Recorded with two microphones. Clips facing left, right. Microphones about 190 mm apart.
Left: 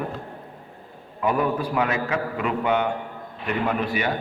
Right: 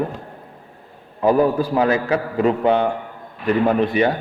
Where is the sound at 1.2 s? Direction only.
30° right (ahead or behind).